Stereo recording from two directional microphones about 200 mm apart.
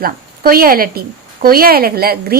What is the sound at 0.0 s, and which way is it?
A woman's voice, 45° right (ahead or behind).